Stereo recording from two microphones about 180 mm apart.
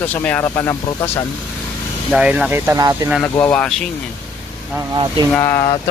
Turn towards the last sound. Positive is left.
turn(degrees=15)  # may be behind; listen again after turning